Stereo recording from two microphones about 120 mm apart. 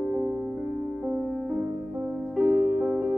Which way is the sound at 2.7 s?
Centre (ahead or behind).